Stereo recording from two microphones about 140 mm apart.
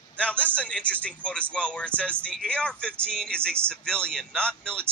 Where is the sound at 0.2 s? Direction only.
10° left (ahead or behind).